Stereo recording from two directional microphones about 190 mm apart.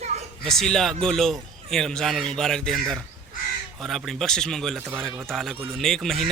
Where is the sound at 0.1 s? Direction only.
35° right (ahead or behind).